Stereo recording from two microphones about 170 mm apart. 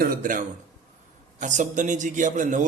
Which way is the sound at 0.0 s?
55° right (ahead or behind).